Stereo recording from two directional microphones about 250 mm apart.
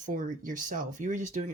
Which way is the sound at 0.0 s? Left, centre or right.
Right.